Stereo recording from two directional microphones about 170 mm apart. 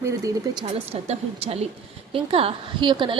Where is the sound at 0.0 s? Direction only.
20° right (ahead or behind).